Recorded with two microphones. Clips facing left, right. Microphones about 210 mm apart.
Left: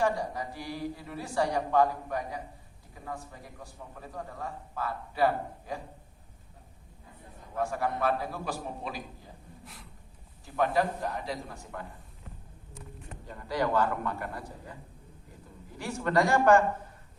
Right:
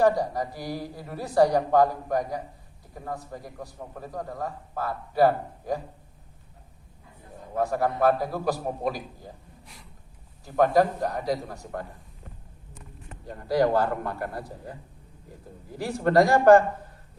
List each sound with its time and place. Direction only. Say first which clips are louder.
0.0 s a man's voice: right 7 dB; 40° right (ahead or behind)
7.5 s a man's voice: right 5 dB; 40° right (ahead or behind)
9.6 s a sound: left 1 dB; centre (ahead or behind)
10.4 s a man's voice: right 7 dB; 40° right (ahead or behind)
13.2 s a man's voice: right 7 dB; 40° right (ahead or behind)
15.8 s a man's voice: right 6 dB; 35° right (ahead or behind)